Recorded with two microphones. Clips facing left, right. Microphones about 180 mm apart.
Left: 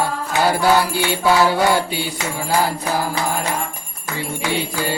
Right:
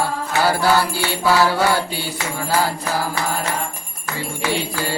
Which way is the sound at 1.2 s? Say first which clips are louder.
Left 1 dB; 20° left (ahead or behind).